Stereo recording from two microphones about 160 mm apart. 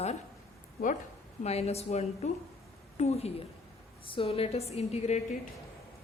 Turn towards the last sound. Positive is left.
turn(degrees=40)  # may be behind; listen again after turning